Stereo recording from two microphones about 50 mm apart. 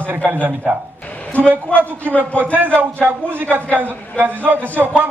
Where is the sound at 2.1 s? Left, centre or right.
Left.